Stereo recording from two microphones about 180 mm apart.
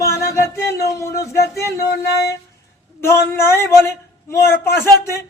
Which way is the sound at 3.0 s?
15° left (ahead or behind).